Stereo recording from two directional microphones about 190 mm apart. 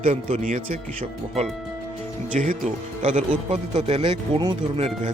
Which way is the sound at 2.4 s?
40° right (ahead or behind).